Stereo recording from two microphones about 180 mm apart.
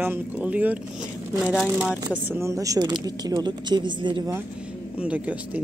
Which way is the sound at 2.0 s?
20° right (ahead or behind).